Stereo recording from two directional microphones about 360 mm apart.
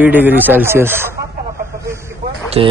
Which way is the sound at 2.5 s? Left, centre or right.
Centre.